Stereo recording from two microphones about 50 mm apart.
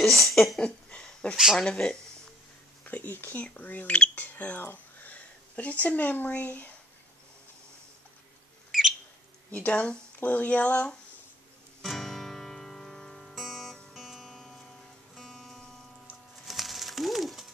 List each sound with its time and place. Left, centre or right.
0.0 s a sound: centre
0.9 s a sound: left
1.3 s speech: centre
1.6 s speech: centre
2.8 s speech: left
4.6 s a sound: left
5.1 s speech: left
8.7 s bird: centre
9.5 s speech: left
11.8 s music: centre
14.2 s music: centre
16.4 s a sound: centre